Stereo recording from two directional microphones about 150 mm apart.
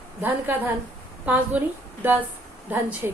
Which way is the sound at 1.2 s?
10° right (ahead or behind).